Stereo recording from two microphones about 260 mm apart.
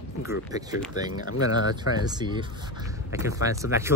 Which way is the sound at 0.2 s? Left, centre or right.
Centre.